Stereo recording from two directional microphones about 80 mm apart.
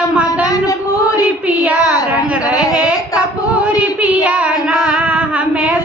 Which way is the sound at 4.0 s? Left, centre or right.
Centre.